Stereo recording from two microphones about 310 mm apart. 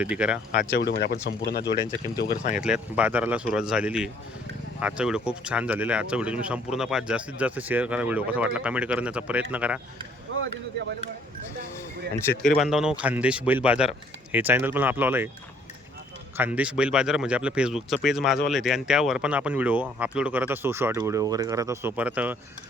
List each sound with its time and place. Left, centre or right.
0.0 s speech: centre
0.5 s speech: left
2.6 s speech: centre
10.3 s a sound: right
12.5 s speech: centre
16.4 s speech: centre